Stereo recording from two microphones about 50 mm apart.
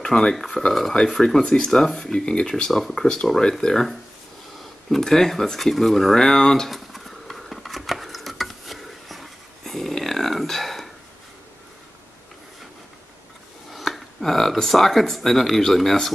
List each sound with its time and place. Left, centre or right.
0.0 s speech: centre
6.7 s a sound: centre
13.7 s speech: centre